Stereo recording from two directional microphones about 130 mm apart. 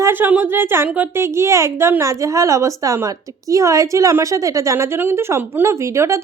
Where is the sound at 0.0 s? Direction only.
15° right (ahead or behind).